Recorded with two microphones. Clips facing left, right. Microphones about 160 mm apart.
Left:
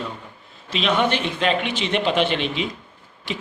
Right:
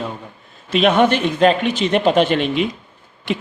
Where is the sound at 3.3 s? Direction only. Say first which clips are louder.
Right 7 dB; 55° right (ahead or behind).